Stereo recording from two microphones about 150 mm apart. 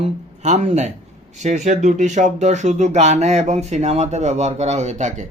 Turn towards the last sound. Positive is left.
turn(degrees=-55)  # may be behind; listen again after turning